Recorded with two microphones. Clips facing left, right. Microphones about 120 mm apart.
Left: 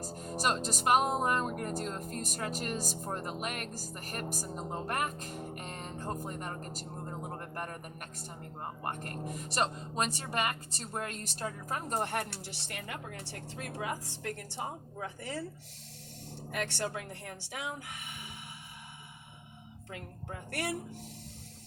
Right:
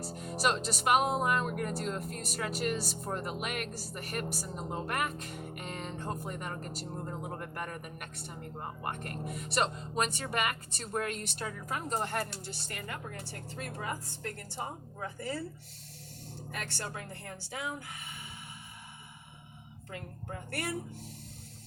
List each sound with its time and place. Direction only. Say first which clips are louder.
0.0 s speech: right 2 dB; 40° left (ahead or behind); by 15.4 s 75° left (ahead or behind)
16.5 s speech: left 5 dB; 70° left (ahead or behind)
20.5 s speech: left 1 dB; 70° left (ahead or behind)